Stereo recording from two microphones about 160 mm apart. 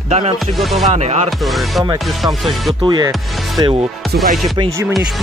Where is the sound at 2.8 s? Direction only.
25° right (ahead or behind).